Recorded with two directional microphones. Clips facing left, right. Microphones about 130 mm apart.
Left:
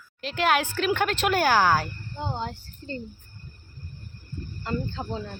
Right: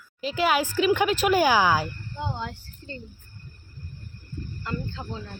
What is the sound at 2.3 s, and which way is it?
Speech, 30° left (ahead or behind).